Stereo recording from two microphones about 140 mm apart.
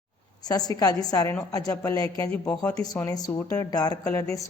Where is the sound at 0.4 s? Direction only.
25° left (ahead or behind).